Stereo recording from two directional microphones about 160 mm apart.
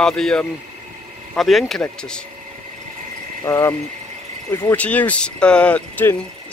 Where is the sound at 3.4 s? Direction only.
20° left (ahead or behind).